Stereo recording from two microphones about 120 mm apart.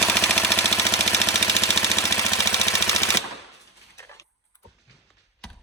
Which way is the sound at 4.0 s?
25° left (ahead or behind).